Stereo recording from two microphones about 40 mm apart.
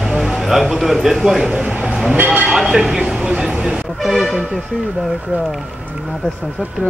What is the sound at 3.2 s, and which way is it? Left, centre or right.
Speech, centre.